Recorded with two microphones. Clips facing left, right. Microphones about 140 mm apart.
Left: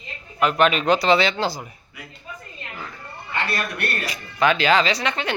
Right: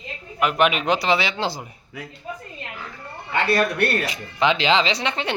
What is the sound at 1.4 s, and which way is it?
Speech, 25° right (ahead or behind).